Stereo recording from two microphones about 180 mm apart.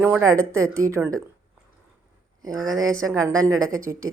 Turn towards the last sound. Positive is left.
turn(degrees=-15)  # may be behind; listen again after turning